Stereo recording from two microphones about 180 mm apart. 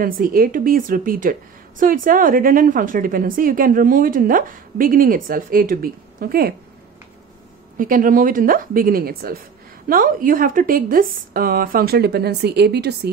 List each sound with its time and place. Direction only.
0.0 s a woman's voice: 50° right (ahead or behind)
7.7 s a woman's voice: 50° right (ahead or behind)